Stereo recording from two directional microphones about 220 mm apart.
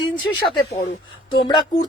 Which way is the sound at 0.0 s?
20° left (ahead or behind).